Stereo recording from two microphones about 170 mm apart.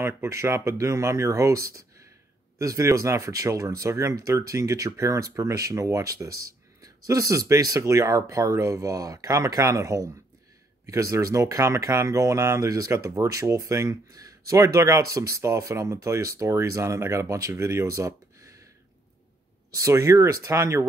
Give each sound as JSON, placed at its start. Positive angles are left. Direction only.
{"t": 0.0, "sound": "speech", "side_deg": -15}
{"t": 19.7, "sound": "speech", "side_deg": -20}